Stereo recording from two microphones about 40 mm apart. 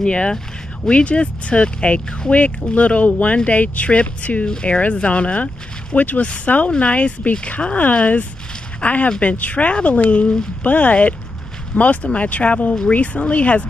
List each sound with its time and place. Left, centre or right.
0.0 s speech: left